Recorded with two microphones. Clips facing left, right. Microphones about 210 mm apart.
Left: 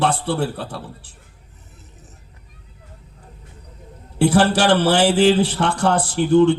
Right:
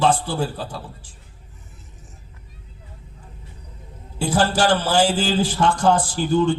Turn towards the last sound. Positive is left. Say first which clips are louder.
# left 5 dB
turn(degrees=65)  # may be behind; listen again after turning